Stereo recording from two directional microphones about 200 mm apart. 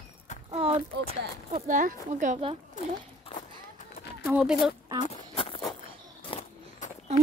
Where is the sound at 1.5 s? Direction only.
40° right (ahead or behind).